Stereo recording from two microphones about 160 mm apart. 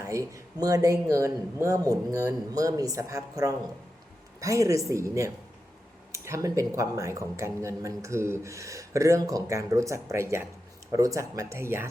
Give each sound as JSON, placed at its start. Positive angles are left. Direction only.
{"t": 0.0, "sound": "a woman's voice", "side_deg": -20}